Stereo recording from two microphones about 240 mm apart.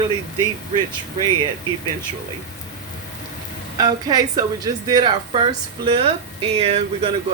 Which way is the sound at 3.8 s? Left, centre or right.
Centre.